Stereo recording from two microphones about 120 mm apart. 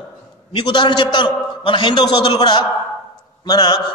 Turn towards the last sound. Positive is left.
turn(degrees=35)  # may be behind; listen again after turning